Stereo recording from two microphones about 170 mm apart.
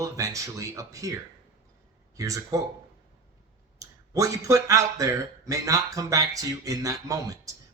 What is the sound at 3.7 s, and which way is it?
A man's voice, 20° right (ahead or behind).